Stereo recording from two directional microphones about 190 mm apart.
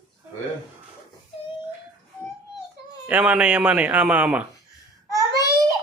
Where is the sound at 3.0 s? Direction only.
5° right (ahead or behind).